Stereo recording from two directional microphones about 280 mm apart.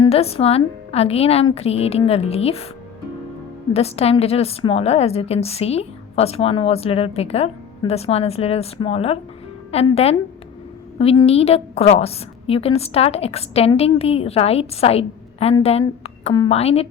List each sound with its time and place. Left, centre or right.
0.0 s a woman's voice: left
3.7 s a woman's voice: left